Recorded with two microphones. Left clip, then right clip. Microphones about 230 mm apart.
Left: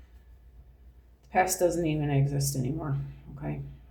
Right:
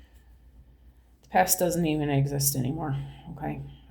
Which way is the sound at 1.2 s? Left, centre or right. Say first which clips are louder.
Right 1 dB; right.